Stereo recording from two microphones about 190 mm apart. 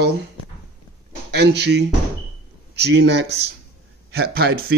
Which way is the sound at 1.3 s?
60° right (ahead or behind).